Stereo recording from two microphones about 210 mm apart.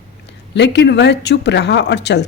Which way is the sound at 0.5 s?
55° left (ahead or behind).